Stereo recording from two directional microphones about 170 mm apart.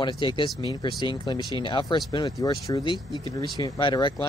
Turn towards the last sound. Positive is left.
turn(degrees=30)  # may be behind; listen again after turning